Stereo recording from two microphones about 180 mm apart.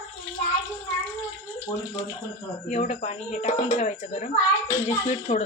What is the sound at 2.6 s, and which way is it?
Speech, 40° left (ahead or behind).